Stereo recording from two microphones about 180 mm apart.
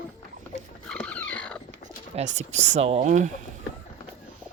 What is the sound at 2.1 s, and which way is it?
Speech, 40° right (ahead or behind).